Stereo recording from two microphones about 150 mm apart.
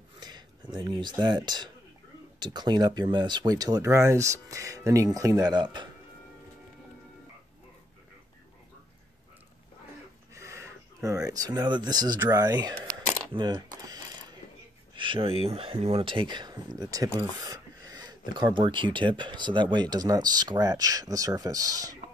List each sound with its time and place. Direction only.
0.2 s speech: 30° right (ahead or behind)
10.3 s a sound: 20° right (ahead or behind)
11.1 s speech: 25° right (ahead or behind)
12.8 s coin: 30° right (ahead or behind)
15.0 s speech: 35° right (ahead or behind)